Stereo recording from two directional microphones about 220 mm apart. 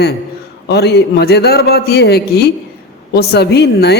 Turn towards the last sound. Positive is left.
turn(degrees=50)  # may be behind; listen again after turning